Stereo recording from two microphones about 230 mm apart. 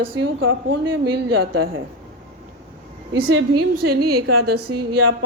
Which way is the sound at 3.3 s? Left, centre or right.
Right.